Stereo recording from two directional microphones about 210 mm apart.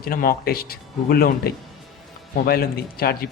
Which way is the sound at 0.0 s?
45° left (ahead or behind).